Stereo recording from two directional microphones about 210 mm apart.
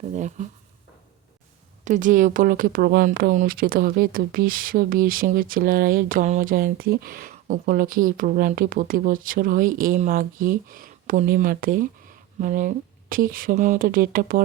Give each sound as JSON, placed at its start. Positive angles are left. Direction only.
{"t": 0.2, "sound": "speech", "side_deg": -35}
{"t": 1.8, "sound": "speech", "side_deg": -35}